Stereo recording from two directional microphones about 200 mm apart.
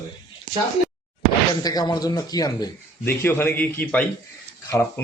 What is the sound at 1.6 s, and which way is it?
A man's voice, 20° left (ahead or behind).